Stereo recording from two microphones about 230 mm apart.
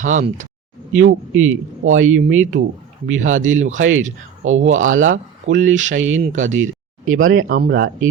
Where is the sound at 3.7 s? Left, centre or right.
Right.